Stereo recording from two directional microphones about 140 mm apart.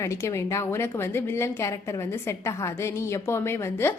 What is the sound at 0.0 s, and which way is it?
A woman's voice, 20° left (ahead or behind).